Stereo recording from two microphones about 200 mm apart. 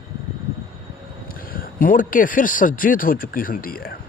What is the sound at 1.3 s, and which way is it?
Speech, 45° left (ahead or behind).